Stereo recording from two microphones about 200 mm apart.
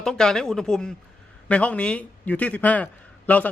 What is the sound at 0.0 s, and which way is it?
A man's voice, 5° left (ahead or behind).